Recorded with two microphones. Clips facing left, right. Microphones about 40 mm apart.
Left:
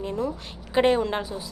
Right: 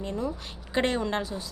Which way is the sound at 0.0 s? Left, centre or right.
Centre.